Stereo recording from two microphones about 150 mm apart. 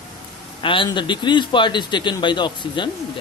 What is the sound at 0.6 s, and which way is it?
Speech, 35° left (ahead or behind).